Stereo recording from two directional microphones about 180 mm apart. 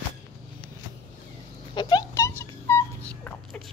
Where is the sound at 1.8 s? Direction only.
25° left (ahead or behind); by 3.7 s 5° left (ahead or behind).